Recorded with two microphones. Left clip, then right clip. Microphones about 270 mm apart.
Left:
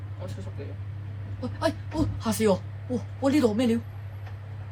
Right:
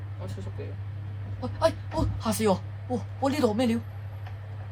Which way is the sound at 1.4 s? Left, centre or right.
Centre.